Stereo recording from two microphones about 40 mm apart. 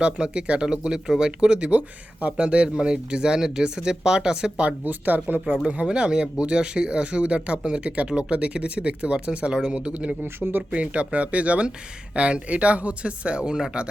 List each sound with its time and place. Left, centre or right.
0.0 s speech: right
4.9 s speech: right
5.6 s speech: right